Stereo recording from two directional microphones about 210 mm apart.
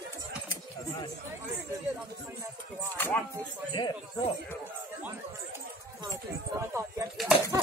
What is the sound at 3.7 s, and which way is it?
Speech, 20° left (ahead or behind).